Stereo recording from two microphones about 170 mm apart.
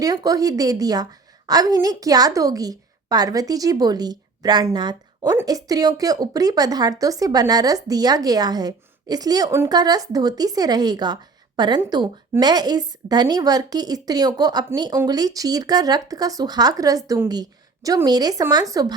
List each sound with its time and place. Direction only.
0.0 s a woman's voice: 20° right (ahead or behind)